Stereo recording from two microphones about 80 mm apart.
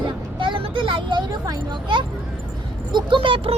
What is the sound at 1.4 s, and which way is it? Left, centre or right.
Speech, right.